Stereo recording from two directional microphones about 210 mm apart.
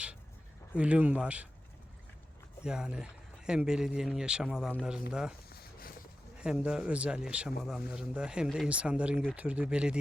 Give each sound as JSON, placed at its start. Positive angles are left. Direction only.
{"t": 0.8, "sound": "speech", "side_deg": -5}
{"t": 2.6, "sound": "speech", "side_deg": -5}
{"t": 5.5, "sound": "a sound", "side_deg": 45}
{"t": 6.4, "sound": "speech", "side_deg": -5}